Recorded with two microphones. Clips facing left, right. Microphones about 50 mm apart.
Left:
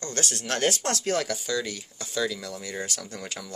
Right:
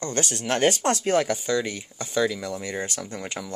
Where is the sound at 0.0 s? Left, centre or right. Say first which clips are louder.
Right 4 dB; right.